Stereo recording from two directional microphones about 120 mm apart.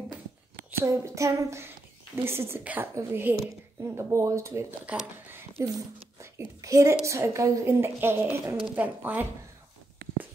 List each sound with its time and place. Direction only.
0.7 s a woman's voice: 25° right (ahead or behind)
4.8 s speech: 10° right (ahead or behind)
6.3 s a woman's voice: 25° right (ahead or behind)